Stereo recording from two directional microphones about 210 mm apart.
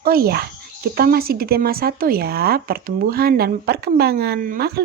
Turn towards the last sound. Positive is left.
turn(degrees=-45)  # may be behind; listen again after turning